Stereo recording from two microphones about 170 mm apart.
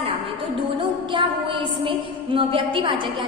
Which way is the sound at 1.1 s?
30° right (ahead or behind).